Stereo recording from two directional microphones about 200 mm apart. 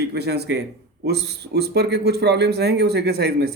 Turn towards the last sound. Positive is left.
turn(degrees=-55)  # may be behind; listen again after turning